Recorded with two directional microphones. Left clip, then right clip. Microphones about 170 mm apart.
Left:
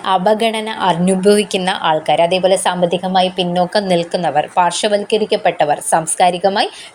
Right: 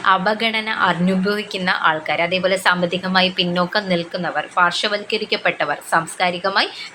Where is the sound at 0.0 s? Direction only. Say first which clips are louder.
Left 3 dB; 30° left (ahead or behind).